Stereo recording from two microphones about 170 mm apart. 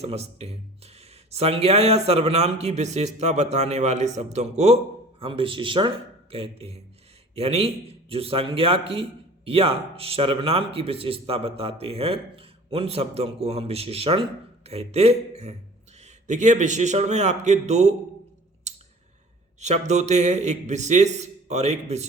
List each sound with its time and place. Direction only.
0.0 s a man's voice: 40° right (ahead or behind)
5.2 s a man's voice: 30° right (ahead or behind)
18.7 s clicking: 40° right (ahead or behind)
19.5 s a man's voice: 40° right (ahead or behind)